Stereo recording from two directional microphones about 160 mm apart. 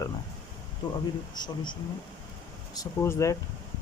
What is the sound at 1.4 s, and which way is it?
Speech, 25° left (ahead or behind).